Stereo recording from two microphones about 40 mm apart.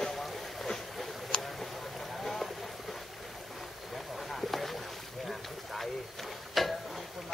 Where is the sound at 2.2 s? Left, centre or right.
Centre.